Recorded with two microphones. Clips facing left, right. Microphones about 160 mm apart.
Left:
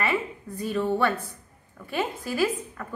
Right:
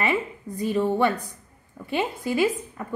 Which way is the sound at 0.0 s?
20° right (ahead or behind).